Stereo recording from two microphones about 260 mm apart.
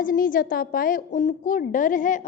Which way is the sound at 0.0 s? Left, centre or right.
Left.